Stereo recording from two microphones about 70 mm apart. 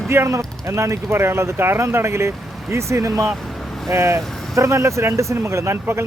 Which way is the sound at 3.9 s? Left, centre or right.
Right.